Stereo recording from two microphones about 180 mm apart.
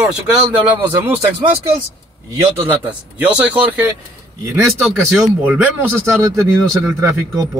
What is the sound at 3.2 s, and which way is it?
Speech, 10° right (ahead or behind).